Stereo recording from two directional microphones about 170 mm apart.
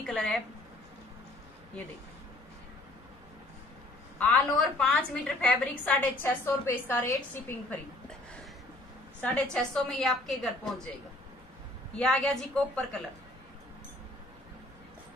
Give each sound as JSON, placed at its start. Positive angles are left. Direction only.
{"t": 0.0, "sound": "a woman's voice", "side_deg": 0}
{"t": 4.2, "sound": "a woman's voice", "side_deg": 5}
{"t": 9.2, "sound": "a woman's voice", "side_deg": 5}
{"t": 12.0, "sound": "a woman's voice", "side_deg": 5}